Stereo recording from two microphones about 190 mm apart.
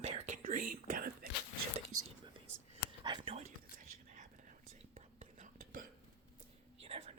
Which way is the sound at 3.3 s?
40° right (ahead or behind).